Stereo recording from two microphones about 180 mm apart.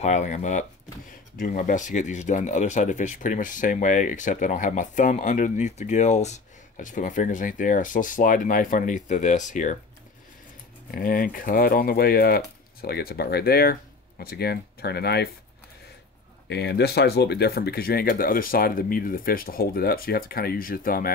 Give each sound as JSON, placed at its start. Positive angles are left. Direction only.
{"t": 0.0, "sound": "speech", "side_deg": 40}
{"t": 10.9, "sound": "speech", "side_deg": 55}
{"t": 16.4, "sound": "speech", "side_deg": 70}